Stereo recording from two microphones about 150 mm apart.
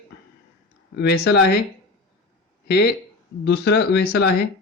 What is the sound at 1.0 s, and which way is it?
Speech, 90° left.